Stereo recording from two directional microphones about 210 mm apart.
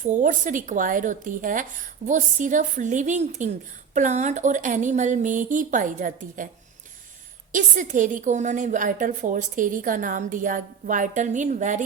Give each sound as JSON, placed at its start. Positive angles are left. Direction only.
{"t": 0.0, "sound": "a woman's voice", "side_deg": -35}
{"t": 7.5, "sound": "a woman's voice", "side_deg": -35}